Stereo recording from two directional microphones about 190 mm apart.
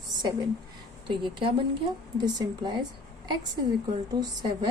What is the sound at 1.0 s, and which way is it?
A woman's voice, 25° right (ahead or behind).